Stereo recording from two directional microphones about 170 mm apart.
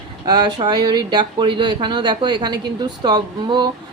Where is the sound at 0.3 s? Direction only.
25° right (ahead or behind).